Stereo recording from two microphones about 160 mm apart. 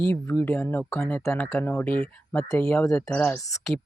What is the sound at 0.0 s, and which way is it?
Speech, 15° left (ahead or behind).